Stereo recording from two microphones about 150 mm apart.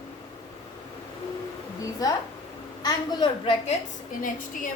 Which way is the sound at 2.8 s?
30° left (ahead or behind).